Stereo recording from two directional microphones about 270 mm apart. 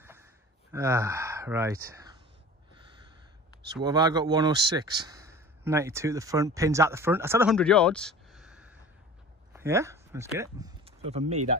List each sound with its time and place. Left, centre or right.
0.7 s speech: centre
3.8 s speech: centre
7.5 s a sound: centre
9.5 s speech: centre
10.9 s speech: right